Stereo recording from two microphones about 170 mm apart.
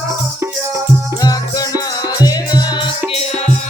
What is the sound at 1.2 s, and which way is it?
Music, 20° left (ahead or behind).